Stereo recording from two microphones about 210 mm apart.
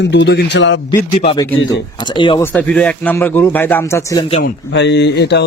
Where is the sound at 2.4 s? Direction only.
10° left (ahead or behind).